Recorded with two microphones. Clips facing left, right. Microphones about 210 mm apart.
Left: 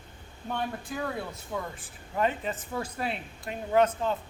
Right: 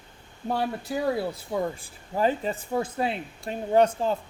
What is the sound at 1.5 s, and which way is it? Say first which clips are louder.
Speech: right 7 dB; 20° right (ahead or behind).